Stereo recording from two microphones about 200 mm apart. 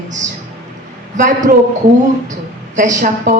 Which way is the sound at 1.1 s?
40° right (ahead or behind).